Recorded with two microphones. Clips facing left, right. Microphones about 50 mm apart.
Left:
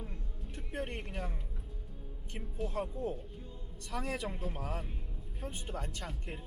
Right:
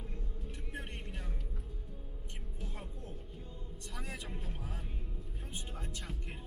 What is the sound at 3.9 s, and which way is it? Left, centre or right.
Speech, left.